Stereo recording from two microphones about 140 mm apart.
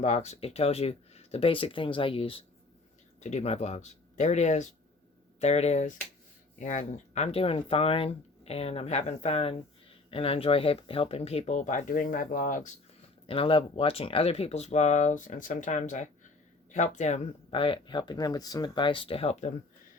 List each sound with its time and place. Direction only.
0.0 s speech: 55° left (ahead or behind)
3.2 s speech: 55° left (ahead or behind); by 12.7 s 70° left (ahead or behind)
13.2 s speech: 40° left (ahead or behind)